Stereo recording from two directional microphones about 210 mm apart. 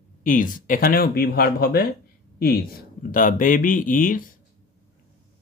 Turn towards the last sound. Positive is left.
turn(degrees=40)  # may be behind; listen again after turning